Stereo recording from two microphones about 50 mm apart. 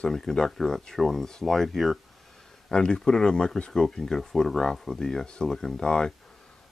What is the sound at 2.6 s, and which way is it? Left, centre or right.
Speech, centre.